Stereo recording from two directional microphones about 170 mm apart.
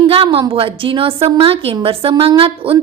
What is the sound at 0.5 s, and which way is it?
A woman's voice, 30° right (ahead or behind).